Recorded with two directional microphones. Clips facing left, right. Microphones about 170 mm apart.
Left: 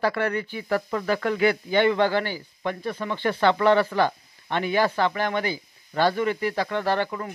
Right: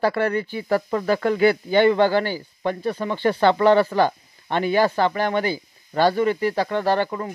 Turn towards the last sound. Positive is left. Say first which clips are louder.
# right 4 dB
turn(degrees=-35)  # may be behind; listen again after turning